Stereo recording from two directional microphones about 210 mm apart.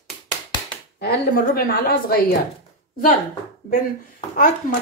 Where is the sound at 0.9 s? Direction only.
45° left (ahead or behind).